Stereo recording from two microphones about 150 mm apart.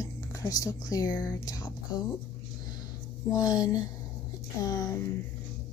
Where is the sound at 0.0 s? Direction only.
20° left (ahead or behind).